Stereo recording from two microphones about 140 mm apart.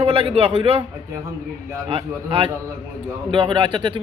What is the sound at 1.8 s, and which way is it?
A man's voice, 40° right (ahead or behind).